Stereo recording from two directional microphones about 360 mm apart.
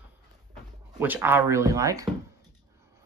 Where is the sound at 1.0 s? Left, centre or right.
Centre.